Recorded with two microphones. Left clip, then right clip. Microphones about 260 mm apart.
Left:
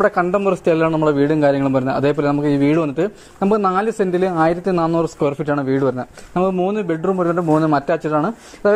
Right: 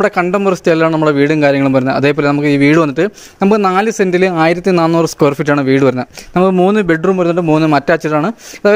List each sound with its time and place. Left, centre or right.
0.0 s a man's voice: right